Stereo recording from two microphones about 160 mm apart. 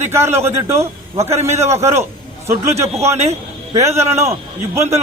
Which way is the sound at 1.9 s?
15° right (ahead or behind).